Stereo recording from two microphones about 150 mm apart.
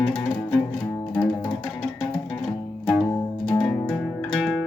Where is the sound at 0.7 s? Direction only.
20° left (ahead or behind).